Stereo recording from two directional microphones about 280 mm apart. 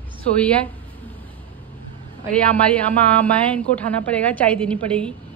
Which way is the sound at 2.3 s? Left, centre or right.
Centre.